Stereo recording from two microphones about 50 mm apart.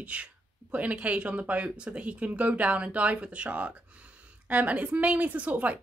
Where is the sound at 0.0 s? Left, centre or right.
Right.